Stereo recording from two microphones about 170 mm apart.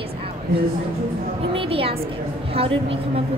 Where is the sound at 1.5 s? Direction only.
35° right (ahead or behind).